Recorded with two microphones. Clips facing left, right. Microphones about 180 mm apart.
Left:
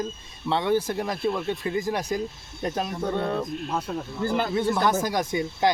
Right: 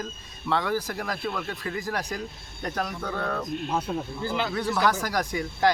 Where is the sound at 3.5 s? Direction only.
5° right (ahead or behind).